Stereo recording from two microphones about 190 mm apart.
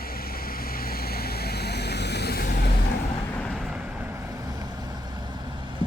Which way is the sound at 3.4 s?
Centre (ahead or behind).